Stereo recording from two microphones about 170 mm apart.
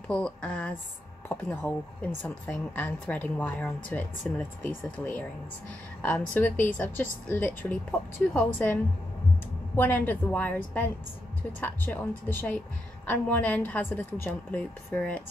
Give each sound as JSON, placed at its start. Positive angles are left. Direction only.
{"t": 0.1, "sound": "a woman's voice", "side_deg": 5}
{"t": 9.8, "sound": "a woman's voice", "side_deg": 10}